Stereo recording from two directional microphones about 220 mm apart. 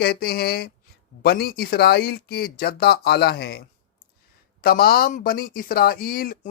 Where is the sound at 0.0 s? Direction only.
45° left (ahead or behind).